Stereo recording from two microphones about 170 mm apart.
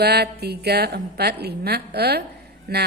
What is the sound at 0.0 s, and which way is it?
A woman's voice, 70° right (ahead or behind).